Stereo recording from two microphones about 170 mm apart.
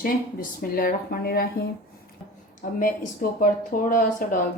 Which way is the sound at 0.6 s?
60° left (ahead or behind).